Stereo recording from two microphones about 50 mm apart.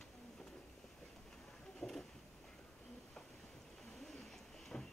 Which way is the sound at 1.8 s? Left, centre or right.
Centre.